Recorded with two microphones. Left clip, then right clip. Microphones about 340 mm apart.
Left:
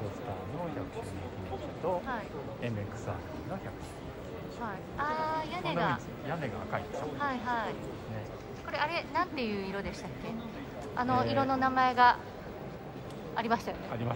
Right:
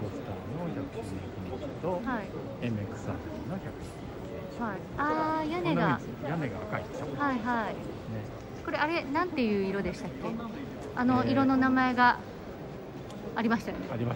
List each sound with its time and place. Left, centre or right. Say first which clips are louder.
1.8 s a sound: even; left
4.6 s a woman's voice: right 3 dB; centre
13.4 s speech: even; centre